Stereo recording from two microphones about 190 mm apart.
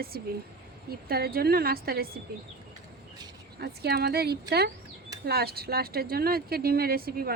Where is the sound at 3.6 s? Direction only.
60° right (ahead or behind).